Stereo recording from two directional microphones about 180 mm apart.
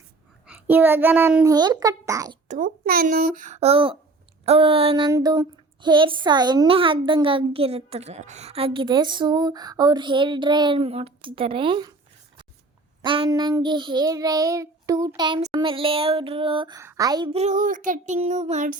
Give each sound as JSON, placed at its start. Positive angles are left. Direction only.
{"t": 0.4, "sound": "a child's voice", "side_deg": -10}
{"t": 1.5, "sound": "a woman's voice", "side_deg": -20}
{"t": 2.5, "sound": "child singing", "side_deg": -50}
{"t": 4.4, "sound": "a woman's voice", "side_deg": -30}
{"t": 13.1, "sound": "a woman's voice", "side_deg": -25}
{"t": 17.3, "sound": "child singing", "side_deg": -40}